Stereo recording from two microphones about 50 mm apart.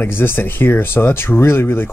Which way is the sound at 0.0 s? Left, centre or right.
Left.